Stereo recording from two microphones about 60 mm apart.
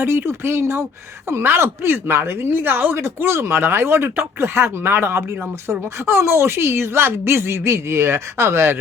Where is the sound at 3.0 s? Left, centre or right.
Right.